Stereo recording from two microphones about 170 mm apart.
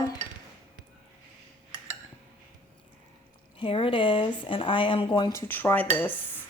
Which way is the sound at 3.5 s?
30° left (ahead or behind).